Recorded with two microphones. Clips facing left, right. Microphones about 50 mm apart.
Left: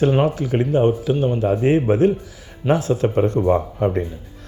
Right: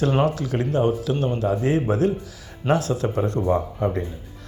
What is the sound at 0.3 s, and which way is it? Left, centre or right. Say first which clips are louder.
Speech: left 4 dB; left.